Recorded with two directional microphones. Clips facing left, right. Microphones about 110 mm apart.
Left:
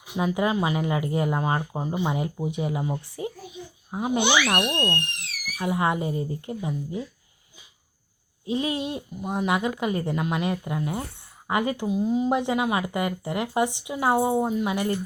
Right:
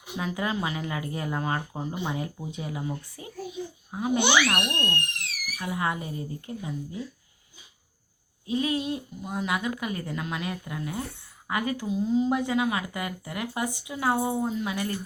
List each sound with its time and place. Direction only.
0.2 s speech: 20° left (ahead or behind)
8.4 s speech: 25° left (ahead or behind)